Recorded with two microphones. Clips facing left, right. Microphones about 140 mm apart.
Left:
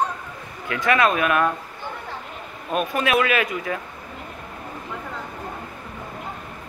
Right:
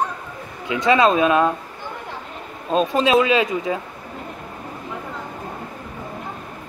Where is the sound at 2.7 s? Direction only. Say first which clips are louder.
Right 5 dB; 25° right (ahead or behind).